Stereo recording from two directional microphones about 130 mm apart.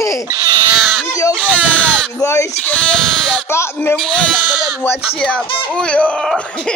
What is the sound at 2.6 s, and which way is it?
Speech, 10° left (ahead or behind).